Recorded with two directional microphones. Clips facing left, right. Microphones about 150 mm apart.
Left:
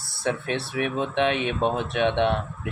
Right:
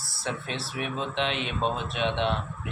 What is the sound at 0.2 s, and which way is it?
Speech, 60° left (ahead or behind).